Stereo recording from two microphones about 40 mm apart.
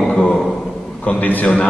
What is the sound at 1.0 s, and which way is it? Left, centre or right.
Speech, left.